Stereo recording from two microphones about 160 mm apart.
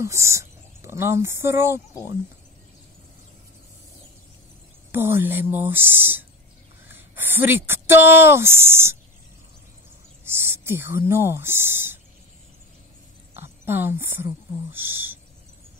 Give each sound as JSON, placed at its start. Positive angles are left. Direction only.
{"t": 0.0, "sound": "speech", "side_deg": -20}
{"t": 4.9, "sound": "speech", "side_deg": -15}
{"t": 10.2, "sound": "speech", "side_deg": -15}
{"t": 13.3, "sound": "speech", "side_deg": -15}